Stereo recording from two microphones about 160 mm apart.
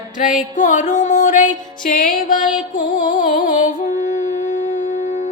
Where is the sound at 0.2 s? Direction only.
55° left (ahead or behind).